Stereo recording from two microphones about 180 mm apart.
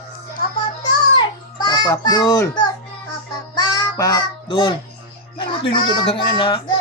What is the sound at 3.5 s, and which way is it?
Honk, 25° left (ahead or behind).